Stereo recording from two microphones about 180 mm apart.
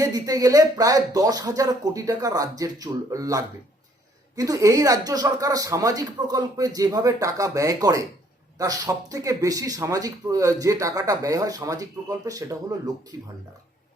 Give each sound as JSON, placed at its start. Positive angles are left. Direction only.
{"t": 0.0, "sound": "speech", "side_deg": -20}